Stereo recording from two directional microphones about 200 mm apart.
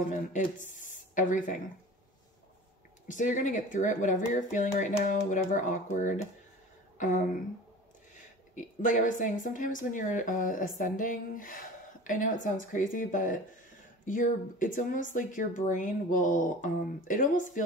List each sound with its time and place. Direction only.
0.1 s speech: 40° left (ahead or behind)
3.1 s speech: 40° left (ahead or behind)
8.5 s speech: 40° left (ahead or behind)